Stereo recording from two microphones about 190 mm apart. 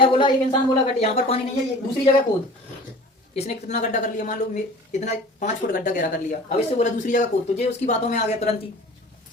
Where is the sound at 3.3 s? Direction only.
35° left (ahead or behind).